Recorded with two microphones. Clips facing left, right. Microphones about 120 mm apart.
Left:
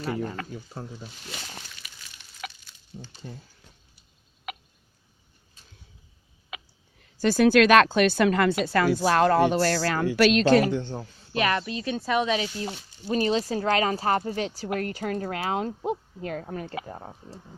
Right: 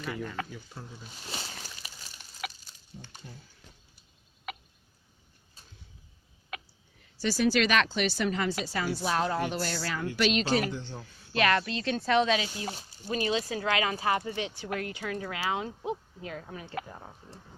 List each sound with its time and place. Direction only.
0.0 s speech: 35° left (ahead or behind)
1.8 s a sound: 35° right (ahead or behind)
2.4 s a sound: 5° right (ahead or behind)
7.2 s a woman's voice: 55° left (ahead or behind); by 10.2 s 85° left
10.3 s speech: 45° left (ahead or behind)
10.8 s speech: 35° left (ahead or behind)
11.3 s speech: 15° left (ahead or behind)
12.4 s speech: 35° left (ahead or behind)
16.8 s speech: 35° left (ahead or behind)